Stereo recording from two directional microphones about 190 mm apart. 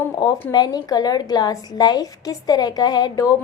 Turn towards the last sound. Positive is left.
turn(degrees=20)  # may be behind; listen again after turning